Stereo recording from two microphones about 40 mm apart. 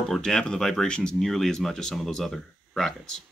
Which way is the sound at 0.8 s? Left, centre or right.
Left.